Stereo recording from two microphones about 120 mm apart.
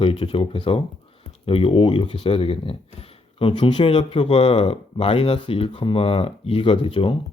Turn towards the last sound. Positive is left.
turn(degrees=45)  # may be behind; listen again after turning